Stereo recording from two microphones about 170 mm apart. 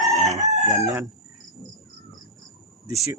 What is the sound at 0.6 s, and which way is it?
Crowing, 20° right (ahead or behind).